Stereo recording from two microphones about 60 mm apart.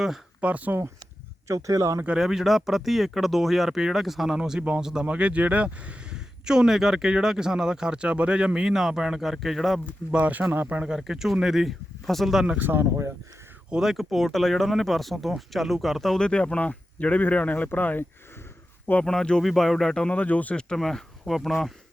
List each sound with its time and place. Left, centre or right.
0.4 s speech: right
1.5 s speech: right
2.1 s speech: centre
5.0 s speech: right; by 9.8 s centre
10.1 s speech: right
10.8 s speech: centre
12.5 s speech: right
13.7 s speech: centre
13.9 s speech: centre; by 18.0 s left
19.0 s speech: centre
20.0 s speech: left
20.7 s speech: centre